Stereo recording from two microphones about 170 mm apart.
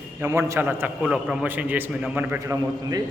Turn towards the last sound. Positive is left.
turn(degrees=-20)  # may be behind; listen again after turning